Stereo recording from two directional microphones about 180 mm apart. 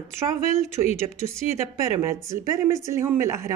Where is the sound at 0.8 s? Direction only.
20° right (ahead or behind).